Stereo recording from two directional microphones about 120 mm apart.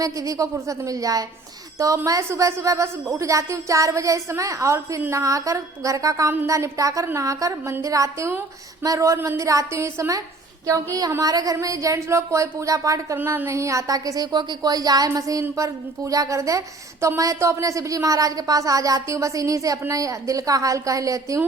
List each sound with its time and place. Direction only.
0.0 s a woman's voice: 30° right (ahead or behind)